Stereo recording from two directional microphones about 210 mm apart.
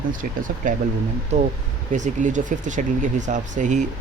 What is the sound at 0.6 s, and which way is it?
Speech, 40° right (ahead or behind).